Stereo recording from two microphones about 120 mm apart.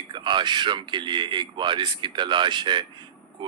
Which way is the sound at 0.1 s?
40° right (ahead or behind).